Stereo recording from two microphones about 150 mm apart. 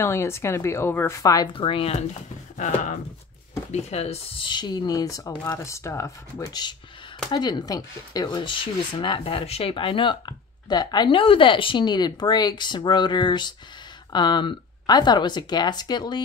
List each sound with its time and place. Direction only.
0.0 s a woman's voice: 20° left (ahead or behind)
1.5 s speech: 35° left (ahead or behind)
2.5 s speech: 55° left (ahead or behind)
3.7 s speech: 45° left (ahead or behind); by 16.2 s 30° left (ahead or behind)